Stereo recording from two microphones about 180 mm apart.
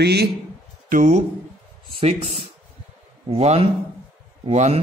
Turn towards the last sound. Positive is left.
turn(degrees=-35)  # may be behind; listen again after turning